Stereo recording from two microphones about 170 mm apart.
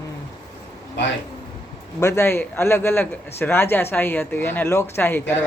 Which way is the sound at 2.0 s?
15° left (ahead or behind).